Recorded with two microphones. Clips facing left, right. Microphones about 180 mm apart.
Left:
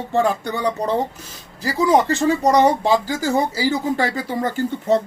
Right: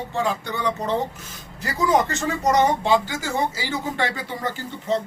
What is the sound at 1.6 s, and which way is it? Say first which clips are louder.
Speech: left 4 dB; 30° left (ahead or behind).